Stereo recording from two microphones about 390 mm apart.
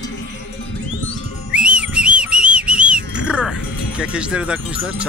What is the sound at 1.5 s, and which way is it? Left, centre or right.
Whistle, centre.